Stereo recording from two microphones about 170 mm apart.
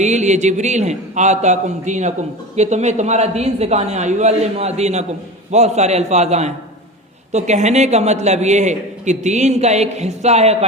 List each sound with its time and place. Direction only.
0.0 s a man's voice: 45° right (ahead or behind)